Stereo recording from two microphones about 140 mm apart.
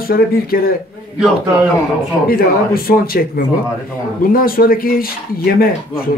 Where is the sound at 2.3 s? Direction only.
90° left.